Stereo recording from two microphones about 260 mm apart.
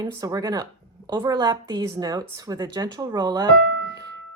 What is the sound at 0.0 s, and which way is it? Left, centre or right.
Speech, centre.